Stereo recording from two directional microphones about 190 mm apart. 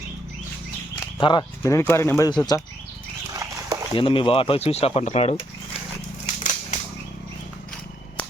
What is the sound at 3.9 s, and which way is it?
Speech, 30° left (ahead or behind).